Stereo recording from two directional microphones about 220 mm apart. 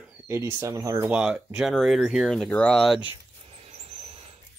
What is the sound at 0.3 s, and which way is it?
Speech, 15° right (ahead or behind).